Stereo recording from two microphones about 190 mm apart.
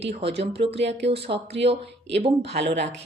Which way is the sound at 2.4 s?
65° right (ahead or behind).